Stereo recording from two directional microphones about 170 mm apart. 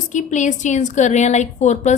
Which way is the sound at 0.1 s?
45° left (ahead or behind).